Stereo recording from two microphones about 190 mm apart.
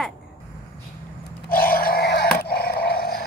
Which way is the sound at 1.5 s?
50° left (ahead or behind).